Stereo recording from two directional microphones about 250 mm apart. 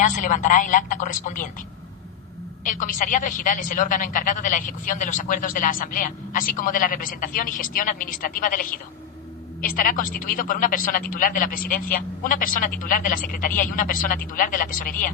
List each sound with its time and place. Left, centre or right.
0.0 s speech: left
2.6 s speech: left